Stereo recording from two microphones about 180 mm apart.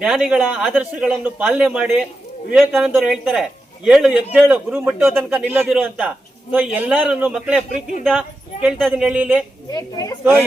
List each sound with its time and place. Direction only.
0.0 s a man's voice: 5° right (ahead or behind)
8.6 s a man's voice: 5° right (ahead or behind)
9.7 s a woman's voice: 20° left (ahead or behind)